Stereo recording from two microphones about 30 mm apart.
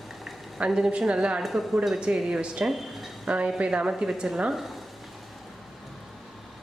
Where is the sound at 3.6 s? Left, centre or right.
Right.